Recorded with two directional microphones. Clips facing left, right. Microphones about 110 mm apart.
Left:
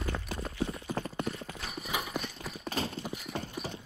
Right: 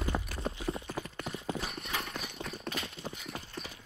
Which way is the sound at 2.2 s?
Centre (ahead or behind).